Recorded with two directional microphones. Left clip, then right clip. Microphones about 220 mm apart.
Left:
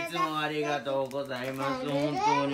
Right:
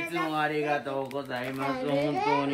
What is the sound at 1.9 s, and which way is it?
Speech, 45° left (ahead or behind).